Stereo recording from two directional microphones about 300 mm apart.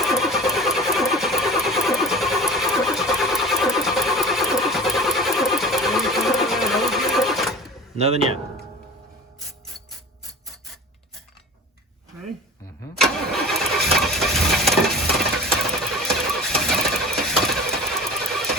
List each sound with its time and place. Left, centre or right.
0.0 s vehicle: centre
7.9 s speech: right
13.0 s engine starting: centre
16.0 s a sound: centre